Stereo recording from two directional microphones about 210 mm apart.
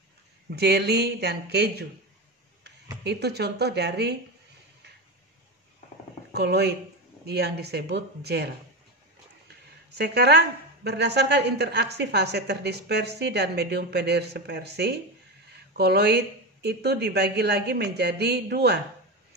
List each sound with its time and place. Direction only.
0.5 s a woman's voice: 50° right (ahead or behind)
6.3 s a woman's voice: 50° right (ahead or behind)
9.9 s a woman's voice: 50° right (ahead or behind)